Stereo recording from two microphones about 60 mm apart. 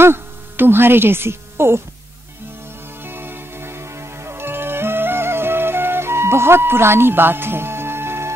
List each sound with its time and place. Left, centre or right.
0.0 s speech: right
3.0 s music: right